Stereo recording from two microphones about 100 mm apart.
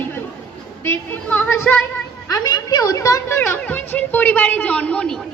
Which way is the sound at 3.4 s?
20° left (ahead or behind).